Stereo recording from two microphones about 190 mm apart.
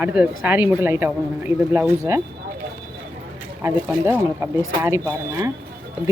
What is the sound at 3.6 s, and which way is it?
Speech, 15° right (ahead or behind).